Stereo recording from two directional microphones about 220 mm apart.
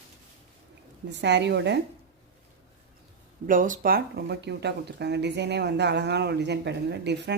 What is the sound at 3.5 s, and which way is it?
Speech, 35° right (ahead or behind).